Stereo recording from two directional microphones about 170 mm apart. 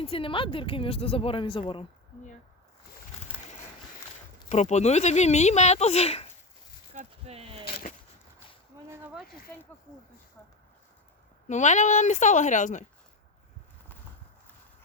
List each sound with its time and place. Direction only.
0.0 s speech: 30° left (ahead or behind)
4.4 s speech: 40° left (ahead or behind)
6.9 s a sound: 40° right (ahead or behind)
11.4 s a woman's voice: 45° left (ahead or behind)